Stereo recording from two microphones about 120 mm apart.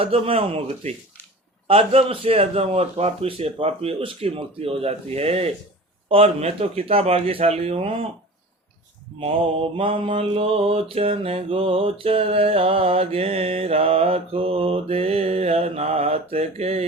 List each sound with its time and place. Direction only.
0.0 s speech: 55° right (ahead or behind)
1.6 s mantra: 55° right (ahead or behind)
9.7 s mantra: 50° right (ahead or behind)